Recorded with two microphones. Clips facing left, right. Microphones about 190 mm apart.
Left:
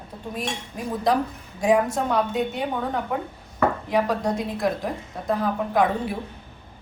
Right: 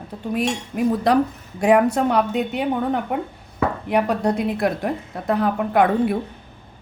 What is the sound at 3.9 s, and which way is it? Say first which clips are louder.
A woman's voice: right 3 dB; 65° right (ahead or behind).